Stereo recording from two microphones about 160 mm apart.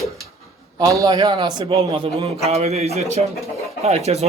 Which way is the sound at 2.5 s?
40° right (ahead or behind).